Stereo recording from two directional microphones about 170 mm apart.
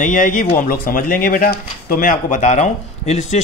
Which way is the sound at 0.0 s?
50° left (ahead or behind).